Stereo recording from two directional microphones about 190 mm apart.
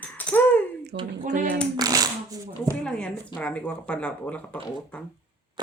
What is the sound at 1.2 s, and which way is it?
Speech, 45° right (ahead or behind).